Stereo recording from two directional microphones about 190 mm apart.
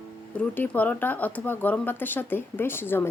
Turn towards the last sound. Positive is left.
turn(degrees=10)  # may be behind; listen again after turning